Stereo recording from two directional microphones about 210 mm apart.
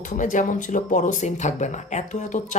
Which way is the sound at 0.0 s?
40° left (ahead or behind).